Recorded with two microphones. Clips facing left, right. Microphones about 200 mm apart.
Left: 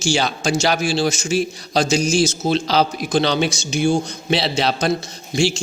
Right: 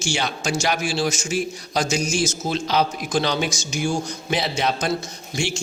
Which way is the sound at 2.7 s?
30° left (ahead or behind).